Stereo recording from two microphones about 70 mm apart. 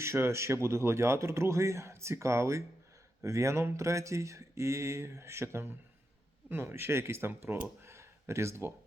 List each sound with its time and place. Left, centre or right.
0.0 s speech: right